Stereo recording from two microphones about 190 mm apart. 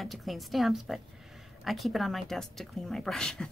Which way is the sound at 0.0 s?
Centre (ahead or behind).